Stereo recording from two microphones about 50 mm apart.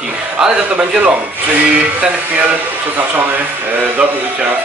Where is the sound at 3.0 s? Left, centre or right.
Right.